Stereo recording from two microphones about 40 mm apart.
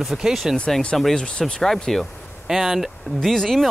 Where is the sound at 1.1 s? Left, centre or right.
Left.